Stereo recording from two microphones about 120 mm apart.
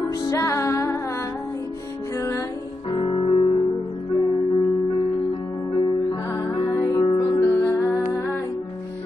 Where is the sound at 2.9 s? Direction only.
45° left (ahead or behind).